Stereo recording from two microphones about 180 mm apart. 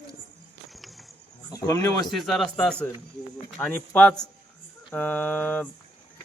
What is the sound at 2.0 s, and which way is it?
A man's voice, centre (ahead or behind).